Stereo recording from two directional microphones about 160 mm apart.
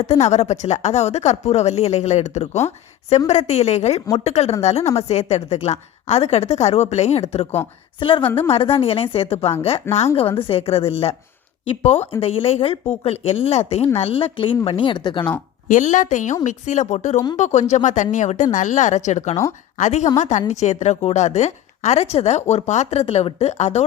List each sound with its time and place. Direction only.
0.0 s a woman's voice: 45° left (ahead or behind)
15.7 s a woman's voice: 50° left (ahead or behind)